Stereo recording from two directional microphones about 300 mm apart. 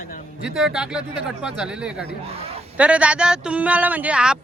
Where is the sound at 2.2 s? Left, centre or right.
Centre.